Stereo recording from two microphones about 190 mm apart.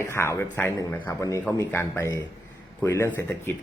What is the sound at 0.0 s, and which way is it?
Speech, 15° left (ahead or behind).